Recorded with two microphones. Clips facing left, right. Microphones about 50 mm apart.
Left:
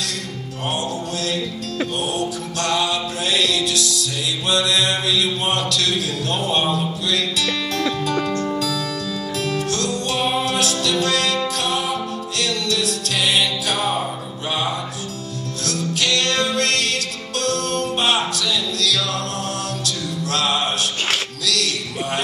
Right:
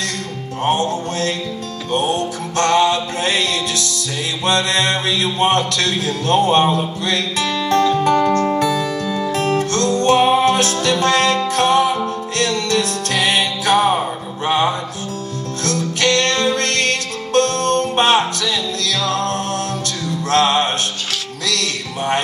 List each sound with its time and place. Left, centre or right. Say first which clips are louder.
0.7 s a man's voice: right 7 dB; right
2.0 s music: right 4 dB; right
4.5 s a man's voice: right 3 dB; right
7.7 s music: right 10 dB; right
15.6 s music: right 5 dB; right
20.2 s music: right 6 dB; right